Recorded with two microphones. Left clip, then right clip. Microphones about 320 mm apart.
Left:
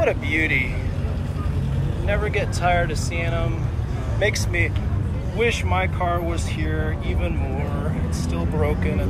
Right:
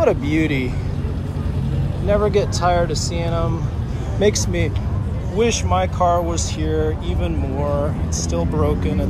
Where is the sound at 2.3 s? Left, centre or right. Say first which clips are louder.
Right 4 dB; centre.